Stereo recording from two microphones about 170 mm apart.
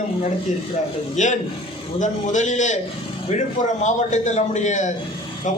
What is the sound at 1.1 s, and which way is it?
A man's voice, 45° left (ahead or behind).